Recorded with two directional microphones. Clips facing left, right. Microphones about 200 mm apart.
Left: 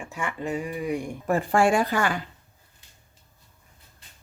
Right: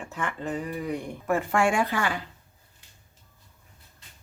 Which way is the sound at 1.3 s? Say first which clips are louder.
Left 3 dB; 35° left (ahead or behind).